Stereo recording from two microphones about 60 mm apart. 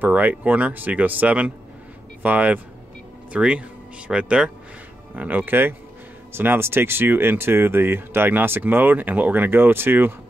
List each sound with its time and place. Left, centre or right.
0.0 s speech: right